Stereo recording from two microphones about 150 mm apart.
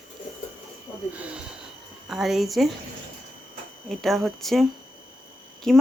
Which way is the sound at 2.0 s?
Centre (ahead or behind).